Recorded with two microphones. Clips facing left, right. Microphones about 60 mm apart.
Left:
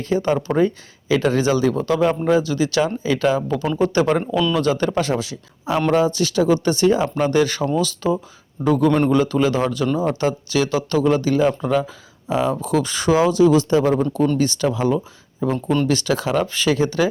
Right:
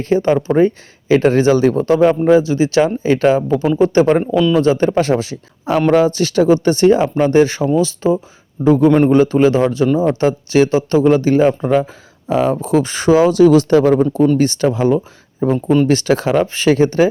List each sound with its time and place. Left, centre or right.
0.0 s a man's voice: right
14.3 s a man's voice: right
15.4 s speech: centre
15.9 s a man's voice: right